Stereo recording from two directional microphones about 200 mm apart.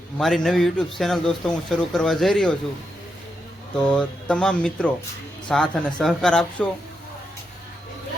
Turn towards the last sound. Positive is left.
turn(degrees=5)  # may be behind; listen again after turning